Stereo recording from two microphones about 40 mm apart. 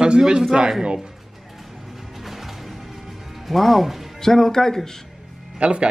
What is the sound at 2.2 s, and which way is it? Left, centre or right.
Music, centre.